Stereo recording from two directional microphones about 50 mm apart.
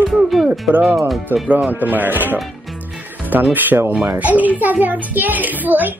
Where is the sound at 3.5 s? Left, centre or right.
Right.